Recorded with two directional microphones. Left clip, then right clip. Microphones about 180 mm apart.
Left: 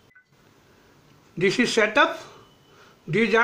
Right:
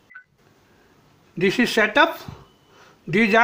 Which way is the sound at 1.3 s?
30° right (ahead or behind).